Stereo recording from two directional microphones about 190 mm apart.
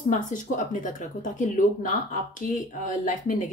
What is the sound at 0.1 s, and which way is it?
Speech, 40° left (ahead or behind).